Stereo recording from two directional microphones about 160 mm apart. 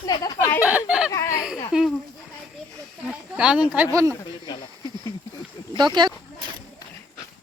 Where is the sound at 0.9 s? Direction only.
5° right (ahead or behind).